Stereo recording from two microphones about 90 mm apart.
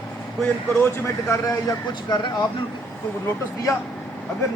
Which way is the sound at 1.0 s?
40° left (ahead or behind).